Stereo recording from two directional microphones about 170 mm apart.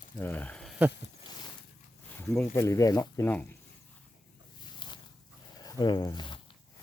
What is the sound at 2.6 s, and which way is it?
Speech, 20° left (ahead or behind).